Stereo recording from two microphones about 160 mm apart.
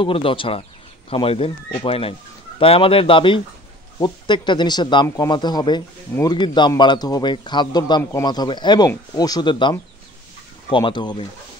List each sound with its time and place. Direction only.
0.0 s a man's voice: 35° left (ahead or behind)